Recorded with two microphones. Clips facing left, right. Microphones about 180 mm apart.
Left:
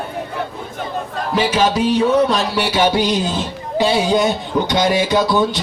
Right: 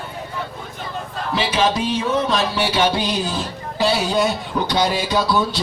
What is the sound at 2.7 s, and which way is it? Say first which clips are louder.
Speech: left 5 dB; 15° left (ahead or behind).